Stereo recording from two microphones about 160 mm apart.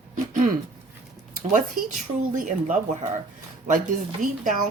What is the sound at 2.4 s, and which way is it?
A woman's voice, 55° right (ahead or behind).